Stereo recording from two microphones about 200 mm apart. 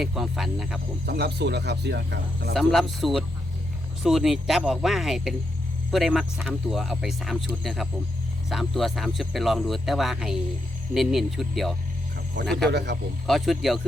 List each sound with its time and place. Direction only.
0.0 s speech: centre (ahead or behind)
1.0 s speech: 55° right (ahead or behind)
2.5 s speech: centre (ahead or behind)
12.4 s speech: 65° right (ahead or behind)
13.2 s speech: centre (ahead or behind)